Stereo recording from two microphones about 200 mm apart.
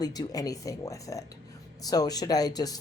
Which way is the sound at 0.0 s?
20° left (ahead or behind).